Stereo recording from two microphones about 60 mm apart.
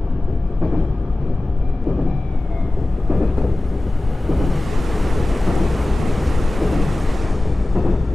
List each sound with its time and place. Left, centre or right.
3.1 s thunder: centre
4.3 s ocean: centre
7.7 s vehicle: centre